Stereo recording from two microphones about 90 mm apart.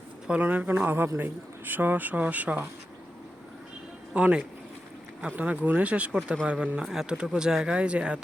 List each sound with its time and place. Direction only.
0.3 s a man's voice: 20° right (ahead or behind)
4.1 s speech: 10° right (ahead or behind)